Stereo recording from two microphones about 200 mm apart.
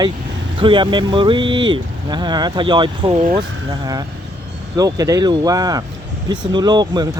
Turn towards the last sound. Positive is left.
turn(degrees=-20)  # may be behind; listen again after turning